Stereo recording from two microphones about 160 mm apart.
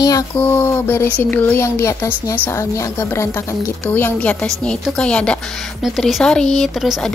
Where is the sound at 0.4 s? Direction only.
15° left (ahead or behind).